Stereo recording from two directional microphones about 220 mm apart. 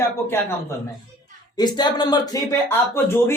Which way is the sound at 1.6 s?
20° left (ahead or behind).